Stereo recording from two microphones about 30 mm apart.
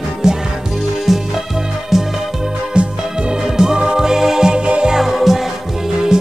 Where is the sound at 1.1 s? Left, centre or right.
Centre.